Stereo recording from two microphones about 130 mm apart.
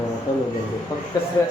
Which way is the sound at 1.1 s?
30° left (ahead or behind).